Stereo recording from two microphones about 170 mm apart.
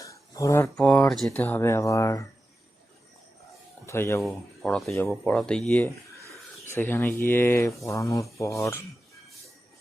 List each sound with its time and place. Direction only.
0.0 s a sound: 20° left (ahead or behind)
0.8 s speech: 5° left (ahead or behind)
3.8 s speech: 15° left (ahead or behind)
4.2 s speech: centre (ahead or behind); by 8.8 s 15° left (ahead or behind)